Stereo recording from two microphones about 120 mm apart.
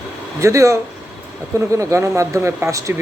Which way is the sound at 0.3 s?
25° right (ahead or behind).